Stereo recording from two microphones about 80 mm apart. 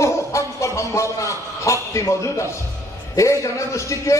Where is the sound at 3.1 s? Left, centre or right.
Left.